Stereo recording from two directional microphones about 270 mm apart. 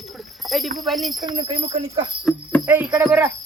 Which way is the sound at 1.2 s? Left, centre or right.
Centre.